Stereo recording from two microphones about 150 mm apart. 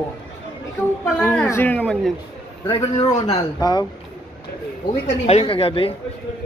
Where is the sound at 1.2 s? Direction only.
10° left (ahead or behind).